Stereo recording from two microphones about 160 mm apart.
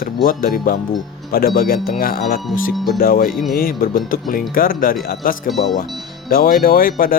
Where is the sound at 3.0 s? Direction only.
65° left (ahead or behind).